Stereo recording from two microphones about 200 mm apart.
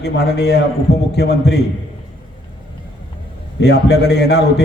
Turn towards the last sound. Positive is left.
turn(degrees=55)  # may be behind; listen again after turning